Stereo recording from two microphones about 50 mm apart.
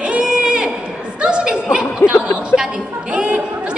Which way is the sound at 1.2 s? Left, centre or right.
Centre.